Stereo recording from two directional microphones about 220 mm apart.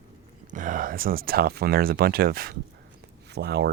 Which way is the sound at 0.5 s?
35° right (ahead or behind).